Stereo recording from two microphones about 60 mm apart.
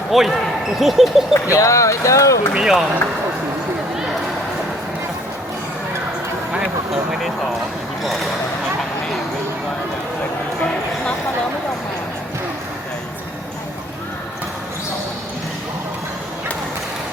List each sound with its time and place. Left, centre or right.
0.1 s speech: centre
1.3 s speech: left
2.5 s speech: centre
6.9 s speech: centre